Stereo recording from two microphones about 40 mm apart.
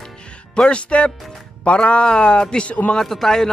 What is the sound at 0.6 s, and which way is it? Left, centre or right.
Speech, left.